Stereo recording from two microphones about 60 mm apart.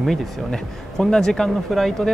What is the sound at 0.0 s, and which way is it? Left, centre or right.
A man's voice, centre.